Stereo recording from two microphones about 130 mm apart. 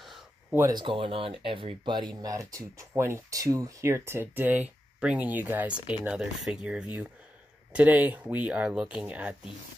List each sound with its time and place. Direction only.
0.0 s a sound: centre (ahead or behind)
0.6 s speech: 30° right (ahead or behind)
0.8 s speech: 45° right (ahead or behind)
2.2 s speech: 25° right (ahead or behind); by 9.3 s 10° right (ahead or behind)